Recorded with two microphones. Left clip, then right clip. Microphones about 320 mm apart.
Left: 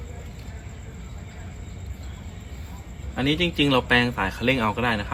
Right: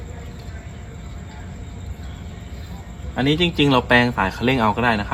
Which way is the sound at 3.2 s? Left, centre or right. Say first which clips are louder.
Right 4 dB; centre.